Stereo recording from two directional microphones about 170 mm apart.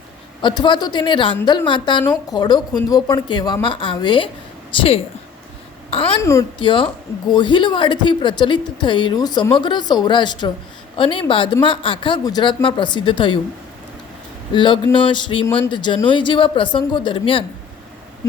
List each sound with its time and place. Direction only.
0.4 s speech: 25° left (ahead or behind)
5.9 s a woman's voice: 35° left (ahead or behind)
14.5 s speech: 30° left (ahead or behind)